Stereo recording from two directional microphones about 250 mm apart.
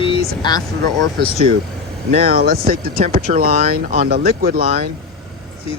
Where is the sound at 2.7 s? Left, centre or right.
Right.